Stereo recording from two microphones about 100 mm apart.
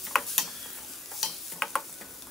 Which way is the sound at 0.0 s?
Centre (ahead or behind).